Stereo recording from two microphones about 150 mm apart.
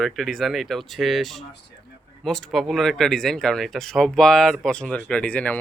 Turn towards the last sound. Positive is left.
turn(degrees=10)  # may be behind; listen again after turning